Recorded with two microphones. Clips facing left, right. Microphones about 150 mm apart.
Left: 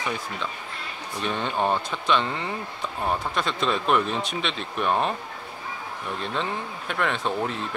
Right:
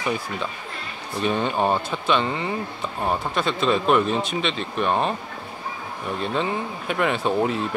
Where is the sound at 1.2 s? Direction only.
5° right (ahead or behind).